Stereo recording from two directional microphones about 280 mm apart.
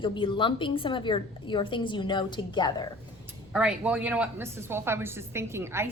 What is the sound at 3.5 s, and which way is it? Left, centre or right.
A woman's voice, centre.